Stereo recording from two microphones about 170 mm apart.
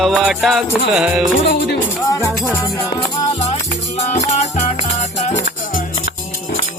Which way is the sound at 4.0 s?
45° left (ahead or behind).